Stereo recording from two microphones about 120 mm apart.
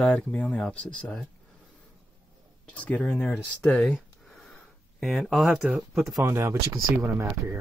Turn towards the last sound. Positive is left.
turn(degrees=-25)  # may be behind; listen again after turning